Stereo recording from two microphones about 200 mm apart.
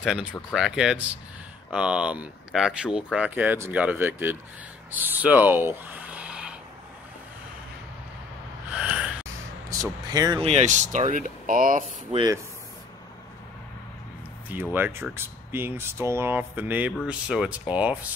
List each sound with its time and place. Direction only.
0.0 s speech: 5° right (ahead or behind)
8.7 s snort: 5° right (ahead or behind)
9.7 s speech: 20° right (ahead or behind)
10.4 s speech: 35° right (ahead or behind)
12.1 s speech: 20° right (ahead or behind)
14.5 s speech: 10° right (ahead or behind)